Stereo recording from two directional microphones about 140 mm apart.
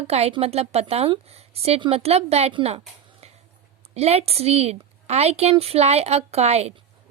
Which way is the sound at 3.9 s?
50° right (ahead or behind).